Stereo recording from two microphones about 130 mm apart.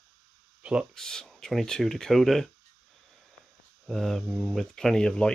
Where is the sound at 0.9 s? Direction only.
5° left (ahead or behind).